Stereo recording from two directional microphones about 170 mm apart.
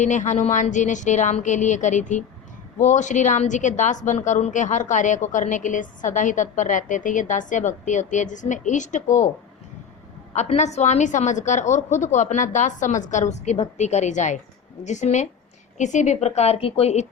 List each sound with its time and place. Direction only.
0.0 s a woman's voice: 45° left (ahead or behind)
10.3 s a woman's voice: 40° left (ahead or behind)